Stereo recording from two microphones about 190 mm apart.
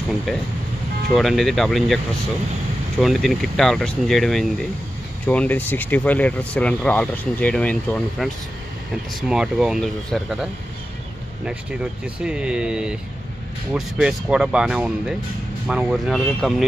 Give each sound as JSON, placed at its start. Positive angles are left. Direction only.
{"t": 0.3, "sound": "speech", "side_deg": 0}
{"t": 3.0, "sound": "speech", "side_deg": 0}
{"t": 9.3, "sound": "speech", "side_deg": -5}